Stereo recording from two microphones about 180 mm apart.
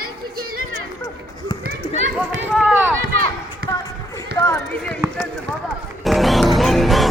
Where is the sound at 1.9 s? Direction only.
40° right (ahead or behind).